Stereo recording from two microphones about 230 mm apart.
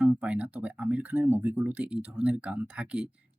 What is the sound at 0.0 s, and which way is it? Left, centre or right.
Speech, centre.